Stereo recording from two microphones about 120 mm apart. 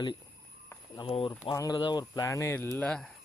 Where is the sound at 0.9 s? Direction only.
45° left (ahead or behind).